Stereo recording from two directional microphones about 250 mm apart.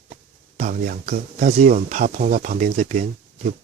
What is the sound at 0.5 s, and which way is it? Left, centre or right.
Speech, right.